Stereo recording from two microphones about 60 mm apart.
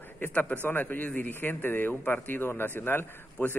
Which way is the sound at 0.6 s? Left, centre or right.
Left.